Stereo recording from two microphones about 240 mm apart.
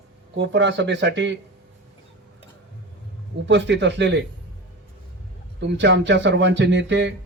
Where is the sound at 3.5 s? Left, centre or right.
Right.